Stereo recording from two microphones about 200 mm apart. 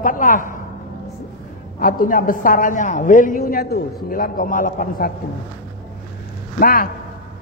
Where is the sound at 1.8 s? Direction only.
45° left (ahead or behind).